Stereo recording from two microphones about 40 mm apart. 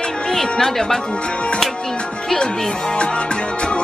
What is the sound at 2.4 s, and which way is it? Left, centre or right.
Speech, centre.